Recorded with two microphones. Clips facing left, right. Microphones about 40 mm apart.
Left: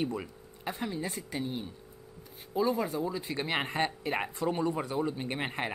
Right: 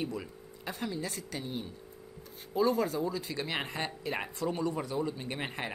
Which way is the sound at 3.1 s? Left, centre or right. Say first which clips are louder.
Left 2 dB; left.